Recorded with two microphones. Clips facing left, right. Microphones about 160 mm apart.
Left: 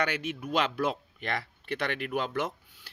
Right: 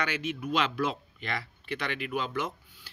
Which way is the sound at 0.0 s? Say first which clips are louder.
Left 1 dB; 55° left (ahead or behind).